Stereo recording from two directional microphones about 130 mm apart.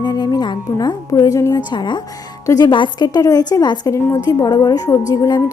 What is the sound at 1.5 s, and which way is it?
A woman's voice, 35° left (ahead or behind).